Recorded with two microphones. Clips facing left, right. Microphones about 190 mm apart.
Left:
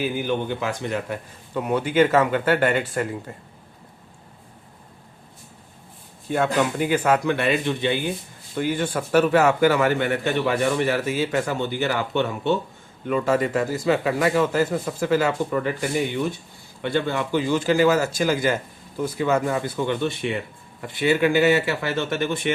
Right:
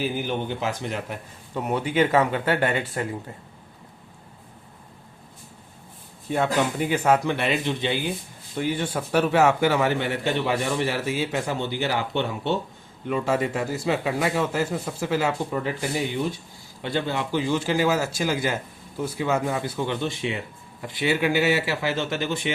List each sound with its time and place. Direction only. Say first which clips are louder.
0.0 s a man's voice: left 2 dB; 55° left (ahead or behind)
6.3 s a man's voice: left 2 dB; 55° left (ahead or behind)